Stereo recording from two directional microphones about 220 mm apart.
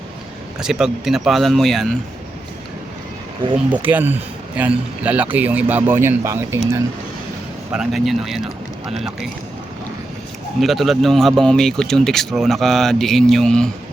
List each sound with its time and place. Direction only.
0.6 s speech: 5° right (ahead or behind)
3.7 s a man's voice: 10° right (ahead or behind)
7.7 s speech: centre (ahead or behind)
10.6 s speech: centre (ahead or behind)